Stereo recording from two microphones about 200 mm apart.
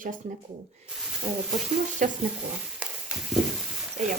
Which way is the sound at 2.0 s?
40° right (ahead or behind).